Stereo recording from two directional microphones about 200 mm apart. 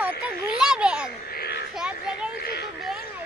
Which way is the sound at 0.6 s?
5° right (ahead or behind).